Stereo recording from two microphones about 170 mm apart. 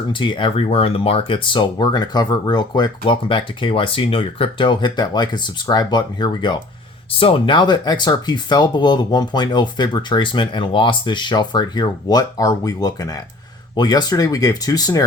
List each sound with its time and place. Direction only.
0.1 s speech: 30° left (ahead or behind)